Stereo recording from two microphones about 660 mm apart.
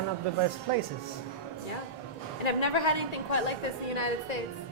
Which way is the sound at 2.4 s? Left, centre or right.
Left.